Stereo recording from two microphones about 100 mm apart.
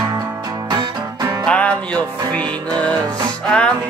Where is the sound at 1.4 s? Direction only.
10° left (ahead or behind).